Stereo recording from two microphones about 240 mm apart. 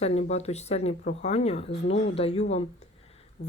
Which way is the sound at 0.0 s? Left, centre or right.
Left.